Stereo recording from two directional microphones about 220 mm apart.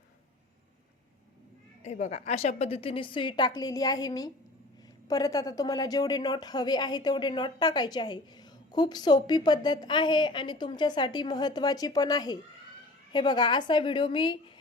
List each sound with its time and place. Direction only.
1.8 s a woman's voice: 30° left (ahead or behind)